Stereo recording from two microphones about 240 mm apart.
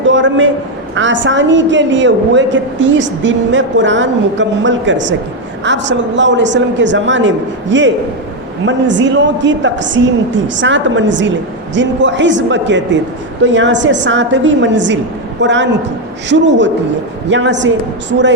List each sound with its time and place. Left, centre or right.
0.0 s a man's voice: right